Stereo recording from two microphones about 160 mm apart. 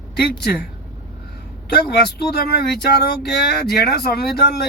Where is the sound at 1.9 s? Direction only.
90° left.